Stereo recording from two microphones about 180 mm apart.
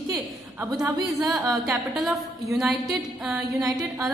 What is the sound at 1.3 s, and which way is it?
A woman's voice, centre (ahead or behind).